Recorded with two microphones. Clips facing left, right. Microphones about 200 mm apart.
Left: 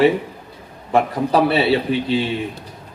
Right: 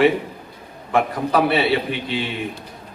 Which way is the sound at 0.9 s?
35° left (ahead or behind).